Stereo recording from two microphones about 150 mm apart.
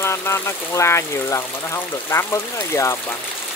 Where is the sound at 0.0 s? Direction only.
15° left (ahead or behind).